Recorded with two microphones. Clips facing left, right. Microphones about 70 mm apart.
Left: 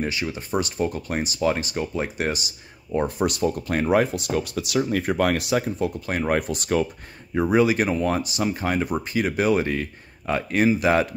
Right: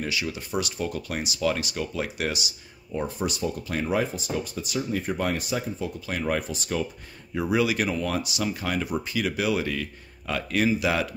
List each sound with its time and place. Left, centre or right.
0.0 s speech: left
2.9 s speech: left
6.4 s speech: left
7.3 s speech: left